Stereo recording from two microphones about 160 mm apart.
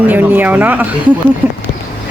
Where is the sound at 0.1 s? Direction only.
10° right (ahead or behind).